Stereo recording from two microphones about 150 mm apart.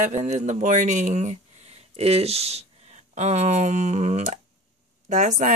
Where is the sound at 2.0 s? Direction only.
45° right (ahead or behind).